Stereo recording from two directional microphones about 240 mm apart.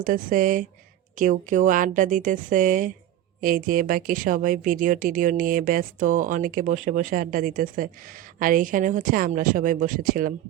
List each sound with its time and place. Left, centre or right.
0.0 s a woman's voice: right